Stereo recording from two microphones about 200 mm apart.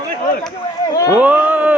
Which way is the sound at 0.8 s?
15° left (ahead or behind).